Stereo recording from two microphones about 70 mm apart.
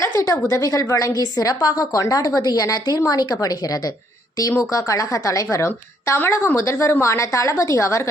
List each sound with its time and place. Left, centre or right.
0.0 s a woman's voice: left
4.7 s a woman's voice: left